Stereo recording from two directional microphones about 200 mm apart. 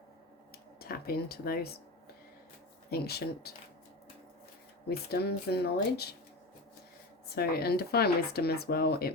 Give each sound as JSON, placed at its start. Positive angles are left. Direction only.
{"t": 0.8, "sound": "speech", "side_deg": 50}
{"t": 2.9, "sound": "speech", "side_deg": 50}
{"t": 4.9, "sound": "speech", "side_deg": 50}
{"t": 7.3, "sound": "speech", "side_deg": 50}